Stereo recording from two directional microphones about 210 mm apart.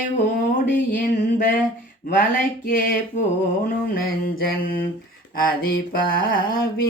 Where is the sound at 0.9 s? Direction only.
40° left (ahead or behind).